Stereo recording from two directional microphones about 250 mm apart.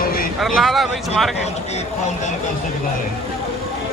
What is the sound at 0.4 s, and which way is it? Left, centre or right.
Speech, centre.